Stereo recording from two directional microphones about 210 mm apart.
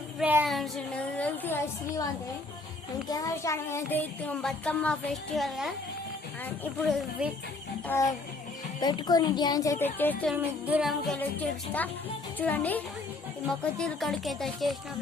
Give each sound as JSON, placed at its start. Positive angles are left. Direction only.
{"t": 0.2, "sound": "child singing", "side_deg": -5}
{"t": 1.1, "sound": "a woman's voice", "side_deg": 10}
{"t": 3.1, "sound": "child singing", "side_deg": 15}
{"t": 5.4, "sound": "speech", "side_deg": 0}
{"t": 6.7, "sound": "speech", "side_deg": 0}
{"t": 7.9, "sound": "child singing", "side_deg": 15}
{"t": 10.3, "sound": "speech", "side_deg": -5}
{"t": 12.4, "sound": "child singing", "side_deg": 10}
{"t": 13.4, "sound": "speech", "side_deg": 0}